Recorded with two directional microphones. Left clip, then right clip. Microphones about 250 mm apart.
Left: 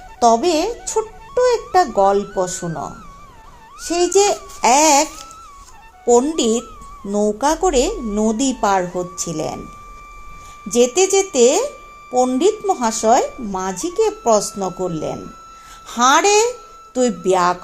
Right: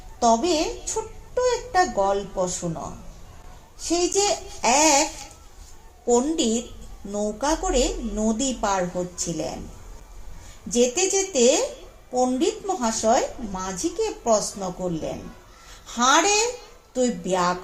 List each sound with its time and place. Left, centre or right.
0.2 s speech: left
6.1 s speech: left
10.7 s speech: left